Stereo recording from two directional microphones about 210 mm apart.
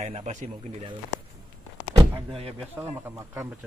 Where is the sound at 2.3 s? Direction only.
25° right (ahead or behind).